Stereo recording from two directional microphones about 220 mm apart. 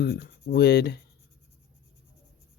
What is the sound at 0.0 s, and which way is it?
Speech, 45° left (ahead or behind).